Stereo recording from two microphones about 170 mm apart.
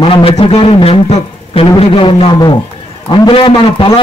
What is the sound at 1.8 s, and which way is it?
Speech, 30° left (ahead or behind).